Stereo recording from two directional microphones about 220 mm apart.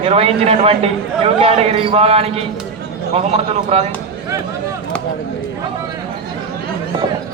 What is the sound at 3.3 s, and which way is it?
Speech, 30° right (ahead or behind).